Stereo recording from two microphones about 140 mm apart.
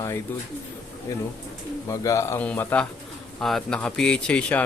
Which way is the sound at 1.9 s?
20° left (ahead or behind).